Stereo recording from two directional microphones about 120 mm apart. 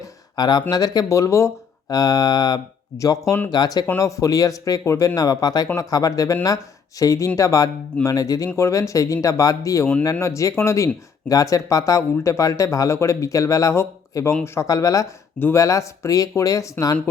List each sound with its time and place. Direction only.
0.0 s a sound: 35° left (ahead or behind)
0.7 s speech: 35° left (ahead or behind)
15.4 s speech: 15° left (ahead or behind)
15.6 s speech: 25° left (ahead or behind)